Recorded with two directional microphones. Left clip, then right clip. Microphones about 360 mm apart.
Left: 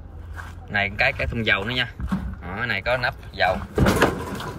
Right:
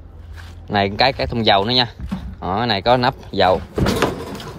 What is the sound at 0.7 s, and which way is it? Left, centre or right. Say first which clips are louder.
Speech: right 5 dB; right.